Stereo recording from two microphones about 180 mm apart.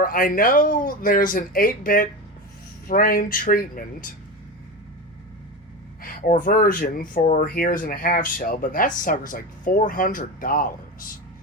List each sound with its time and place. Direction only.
0.0 s speech: 50° left (ahead or behind)
6.0 s speech: 50° left (ahead or behind)